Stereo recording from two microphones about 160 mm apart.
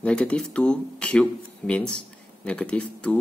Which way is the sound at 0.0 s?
5° left (ahead or behind).